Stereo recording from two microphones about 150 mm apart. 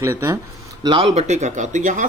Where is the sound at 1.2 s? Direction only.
50° right (ahead or behind).